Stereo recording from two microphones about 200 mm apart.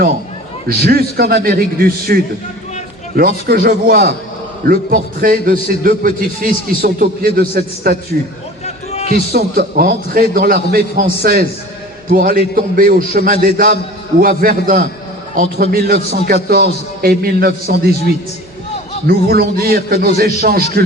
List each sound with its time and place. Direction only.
0.7 s a man's voice: 50° right (ahead or behind)
8.6 s a sound: 35° left (ahead or behind)
9.0 s a man's voice: 50° right (ahead or behind)
19.0 s a man's voice: 50° right (ahead or behind)